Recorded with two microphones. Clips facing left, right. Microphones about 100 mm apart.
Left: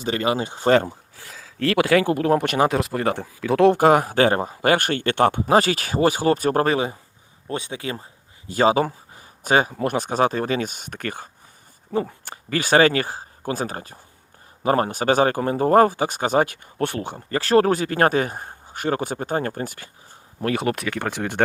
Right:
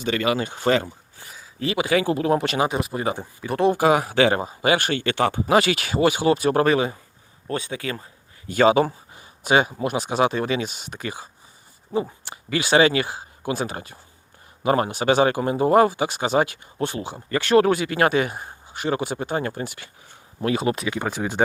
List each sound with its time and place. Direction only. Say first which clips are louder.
0.0 s speech: even; 35° left (ahead or behind)
0.7 s speech: left 4 dB; 55° left (ahead or behind)
1.1 s speech: left 2 dB; 90° left; by 2.6 s 50° left (ahead or behind)
2.6 s speech: left 3 dB; 90° left
3.8 s speech: left 2 dB; 50° left (ahead or behind)
5.5 s speech: left 1 dB; 40° left (ahead or behind)
7.4 s speech: right 1 dB; 25° left (ahead or behind); by 9.8 s 40° left (ahead or behind)
9.8 s speech: left 1 dB; 55° left (ahead or behind)
17.3 s speech: even; 35° left (ahead or behind); by 21.4 s 65° left (ahead or behind)